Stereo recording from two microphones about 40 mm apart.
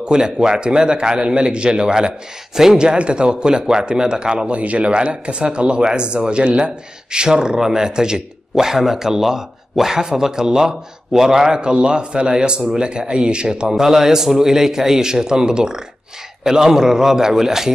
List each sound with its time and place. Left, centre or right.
0.0 s a man's voice: centre
2.8 s a man's voice: right
4.6 s a man's voice: right; by 17.7 s centre